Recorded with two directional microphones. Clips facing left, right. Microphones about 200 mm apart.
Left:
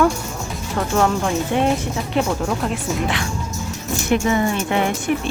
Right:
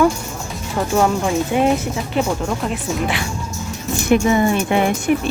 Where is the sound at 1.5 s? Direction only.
5° right (ahead or behind).